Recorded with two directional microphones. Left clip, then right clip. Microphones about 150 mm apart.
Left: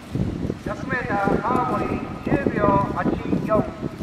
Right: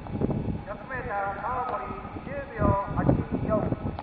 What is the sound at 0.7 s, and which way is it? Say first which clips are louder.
Speech: left 12 dB; 30° left (ahead or behind).